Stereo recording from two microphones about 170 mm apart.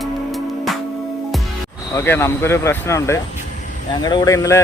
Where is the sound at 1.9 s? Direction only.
15° left (ahead or behind).